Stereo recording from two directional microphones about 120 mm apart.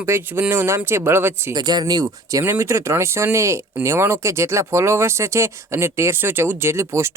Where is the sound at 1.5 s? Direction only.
35° right (ahead or behind).